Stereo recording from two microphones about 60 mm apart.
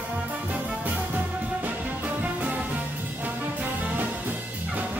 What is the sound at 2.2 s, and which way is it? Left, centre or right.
Music, right.